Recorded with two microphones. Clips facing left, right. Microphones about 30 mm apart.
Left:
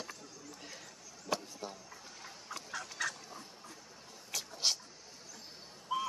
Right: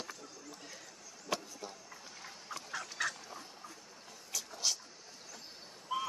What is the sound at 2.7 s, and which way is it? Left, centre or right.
Duck, centre.